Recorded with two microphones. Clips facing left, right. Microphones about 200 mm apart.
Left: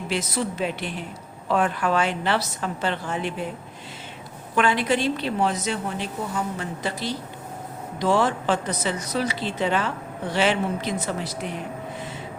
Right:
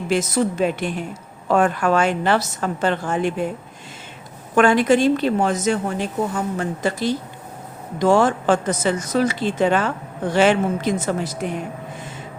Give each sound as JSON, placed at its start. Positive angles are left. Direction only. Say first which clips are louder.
{"t": 0.1, "sound": "speech", "louder": "right 7 dB", "side_deg": -45}
{"t": 4.5, "sound": "speech", "louder": "right 7 dB", "side_deg": -45}